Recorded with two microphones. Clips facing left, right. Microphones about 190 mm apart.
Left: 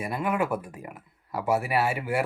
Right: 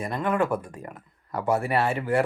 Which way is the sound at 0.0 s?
10° left (ahead or behind).